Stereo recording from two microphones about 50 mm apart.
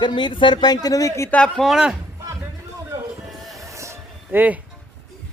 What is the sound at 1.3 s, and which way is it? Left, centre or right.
Speech, left.